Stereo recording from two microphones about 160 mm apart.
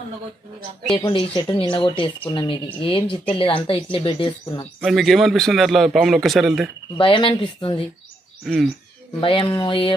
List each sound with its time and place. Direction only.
0.9 s a woman's voice: 35° left (ahead or behind)
4.7 s a man's voice: centre (ahead or behind)
7.0 s a woman's voice: 35° left (ahead or behind)
8.5 s a man's voice: centre (ahead or behind)
9.2 s a woman's voice: 35° left (ahead or behind)